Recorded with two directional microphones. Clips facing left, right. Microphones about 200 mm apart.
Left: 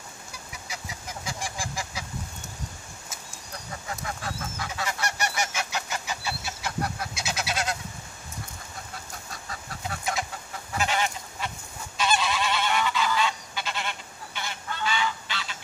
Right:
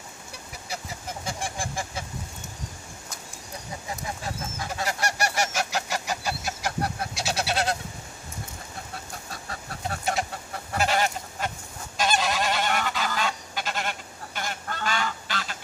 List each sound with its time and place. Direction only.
1.2 s fowl: 55° right (ahead or behind)
3.9 s a sound: 20° right (ahead or behind)
4.8 s goose: 40° right (ahead or behind)
9.3 s chicken: 35° right (ahead or behind)
10.7 s goose: 40° right (ahead or behind)